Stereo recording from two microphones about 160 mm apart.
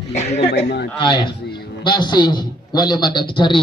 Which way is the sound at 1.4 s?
85° left.